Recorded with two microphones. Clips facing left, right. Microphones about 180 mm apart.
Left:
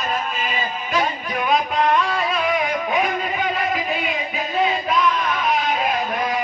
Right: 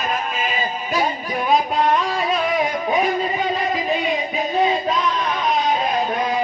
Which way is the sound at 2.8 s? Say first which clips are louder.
Right 2 dB; 35° right (ahead or behind).